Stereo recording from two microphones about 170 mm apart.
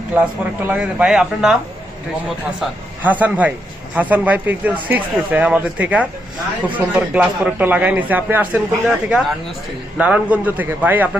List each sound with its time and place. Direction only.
0.7 s speech: 5° right (ahead or behind)
2.6 s speech: 10° right (ahead or behind)